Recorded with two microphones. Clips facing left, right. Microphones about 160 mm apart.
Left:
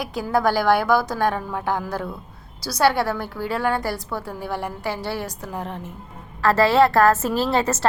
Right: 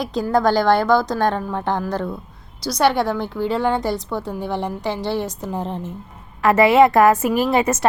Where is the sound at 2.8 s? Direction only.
20° right (ahead or behind).